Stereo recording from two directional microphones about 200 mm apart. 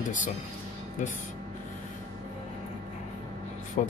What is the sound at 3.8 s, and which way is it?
Speech, 40° left (ahead or behind).